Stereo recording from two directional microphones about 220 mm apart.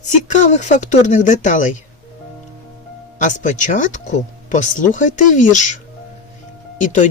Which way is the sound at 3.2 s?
35° left (ahead or behind).